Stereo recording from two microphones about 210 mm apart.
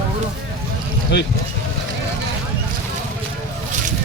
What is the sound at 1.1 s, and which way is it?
Speech, 55° left (ahead or behind).